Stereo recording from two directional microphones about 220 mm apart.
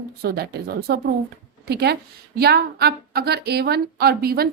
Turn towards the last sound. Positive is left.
turn(degrees=-45)  # may be behind; listen again after turning